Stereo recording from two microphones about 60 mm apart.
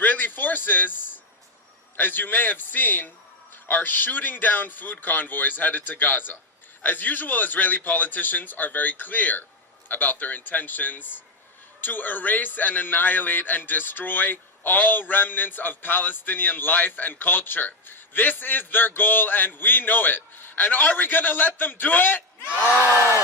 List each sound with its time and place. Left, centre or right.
0.0 s speech: left
2.0 s a man's voice: left